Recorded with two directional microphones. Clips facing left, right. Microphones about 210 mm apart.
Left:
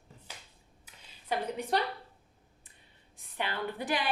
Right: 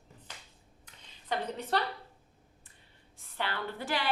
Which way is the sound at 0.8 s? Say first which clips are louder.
Left 1 dB; 10° left (ahead or behind).